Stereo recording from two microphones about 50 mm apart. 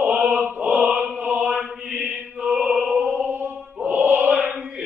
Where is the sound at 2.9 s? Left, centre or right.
Right.